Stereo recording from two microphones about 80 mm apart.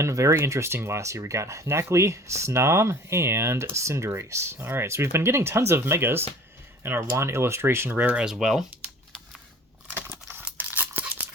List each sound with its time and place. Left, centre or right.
0.0 s speech: right
8.2 s speech: centre
9.9 s a sound: right
10.4 s tearing: right